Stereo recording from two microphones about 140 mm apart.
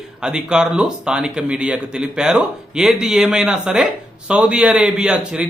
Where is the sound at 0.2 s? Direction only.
5° right (ahead or behind).